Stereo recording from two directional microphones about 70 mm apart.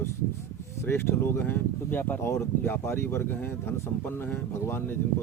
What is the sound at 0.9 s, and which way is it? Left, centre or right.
Speech, left.